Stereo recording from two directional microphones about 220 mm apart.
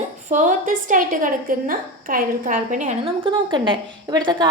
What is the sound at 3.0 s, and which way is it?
A woman's voice, 20° right (ahead or behind).